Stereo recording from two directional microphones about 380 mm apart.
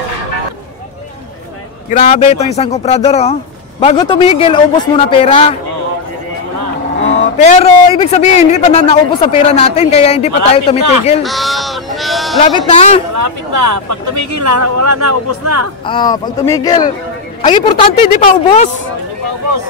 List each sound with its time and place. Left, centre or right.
1.9 s a man's voice: centre
7.2 s a man's voice: centre
11.2 s sheep: centre
12.4 s a man's voice: centre
13.1 s speech: right
15.8 s a man's voice: centre